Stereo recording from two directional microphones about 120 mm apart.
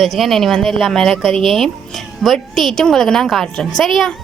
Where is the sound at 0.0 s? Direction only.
Centre (ahead or behind).